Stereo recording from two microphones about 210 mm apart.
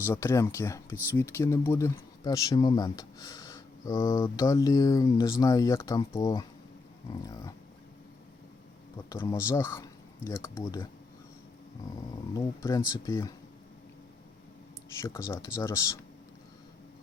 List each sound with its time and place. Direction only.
0.0 s speech: 10° left (ahead or behind)
9.0 s speech: 15° left (ahead or behind)
12.3 s speech: 15° left (ahead or behind)
15.0 s speech: 10° left (ahead or behind)